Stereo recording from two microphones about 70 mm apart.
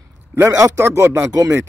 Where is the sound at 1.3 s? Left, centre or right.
Right.